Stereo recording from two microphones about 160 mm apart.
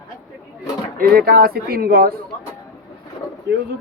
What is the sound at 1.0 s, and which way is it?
Speech, 70° right (ahead or behind).